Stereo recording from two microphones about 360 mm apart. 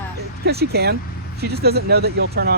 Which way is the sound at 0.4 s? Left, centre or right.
Right.